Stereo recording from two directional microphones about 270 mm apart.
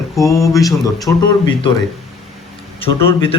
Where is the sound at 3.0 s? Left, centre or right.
Centre.